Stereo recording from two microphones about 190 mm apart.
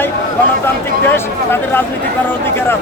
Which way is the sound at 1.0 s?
10° left (ahead or behind).